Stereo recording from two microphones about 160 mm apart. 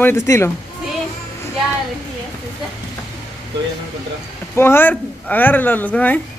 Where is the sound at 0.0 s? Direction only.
15° left (ahead or behind).